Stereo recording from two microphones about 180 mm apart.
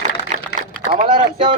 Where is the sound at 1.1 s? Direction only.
45° right (ahead or behind).